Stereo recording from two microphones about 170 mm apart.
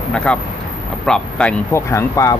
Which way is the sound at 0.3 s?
5° left (ahead or behind).